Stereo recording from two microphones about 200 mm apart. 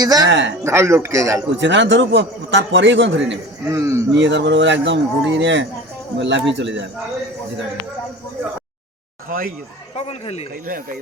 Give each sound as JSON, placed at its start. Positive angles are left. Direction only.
{"t": 0.0, "sound": "speech", "side_deg": -20}
{"t": 0.3, "sound": "a man's voice", "side_deg": -65}
{"t": 0.6, "sound": "speech", "side_deg": -15}
{"t": 1.5, "sound": "a man's voice", "side_deg": -65}
{"t": 3.7, "sound": "speech", "side_deg": -15}
{"t": 4.1, "sound": "a man's voice", "side_deg": -60}
{"t": 9.9, "sound": "speech", "side_deg": 30}